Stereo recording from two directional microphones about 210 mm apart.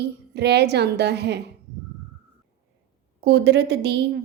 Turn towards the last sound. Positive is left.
turn(degrees=-50)  # may be behind; listen again after turning